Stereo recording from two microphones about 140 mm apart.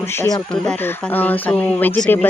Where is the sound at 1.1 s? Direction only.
10° left (ahead or behind).